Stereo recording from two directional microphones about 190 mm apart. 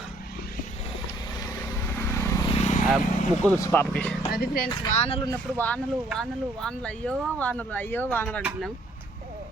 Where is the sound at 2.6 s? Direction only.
40° left (ahead or behind).